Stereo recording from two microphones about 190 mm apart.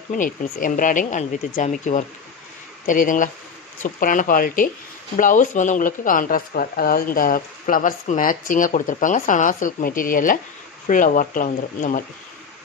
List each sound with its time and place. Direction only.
0.1 s speech: 45° left (ahead or behind)